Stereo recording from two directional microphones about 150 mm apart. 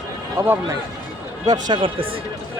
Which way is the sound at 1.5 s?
30° right (ahead or behind).